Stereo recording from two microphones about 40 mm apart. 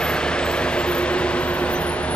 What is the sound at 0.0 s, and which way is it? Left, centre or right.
Vehicle, left.